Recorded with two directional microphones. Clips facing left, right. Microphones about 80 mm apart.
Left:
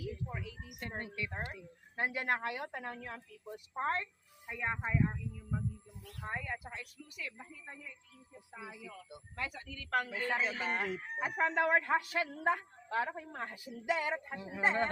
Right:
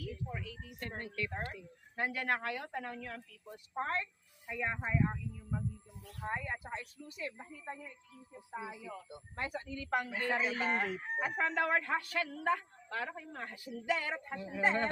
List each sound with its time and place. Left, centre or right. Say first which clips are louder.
0.3 s a woman's voice: even; centre
4.5 s speech: even; centre
6.4 s speech: right 2 dB; right
8.5 s speech: right 5 dB; right; by 10.8 s centre
11.2 s a woman's voice: left 2 dB; centre